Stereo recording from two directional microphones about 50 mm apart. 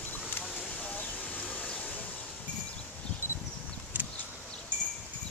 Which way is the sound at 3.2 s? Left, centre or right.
Right.